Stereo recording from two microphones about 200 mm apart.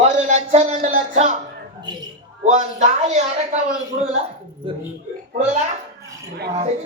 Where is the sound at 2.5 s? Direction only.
35° right (ahead or behind).